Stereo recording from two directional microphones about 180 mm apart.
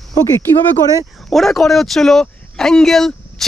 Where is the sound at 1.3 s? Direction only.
Centre (ahead or behind).